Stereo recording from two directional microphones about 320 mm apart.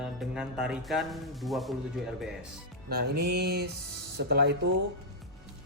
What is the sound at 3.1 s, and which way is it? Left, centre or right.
Music, right.